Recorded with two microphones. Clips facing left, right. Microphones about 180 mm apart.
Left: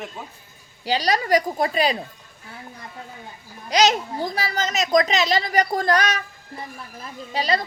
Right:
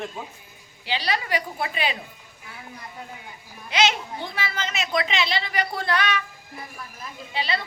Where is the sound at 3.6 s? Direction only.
40° left (ahead or behind).